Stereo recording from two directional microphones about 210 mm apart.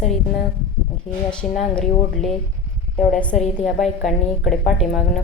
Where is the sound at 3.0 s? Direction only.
40° left (ahead or behind).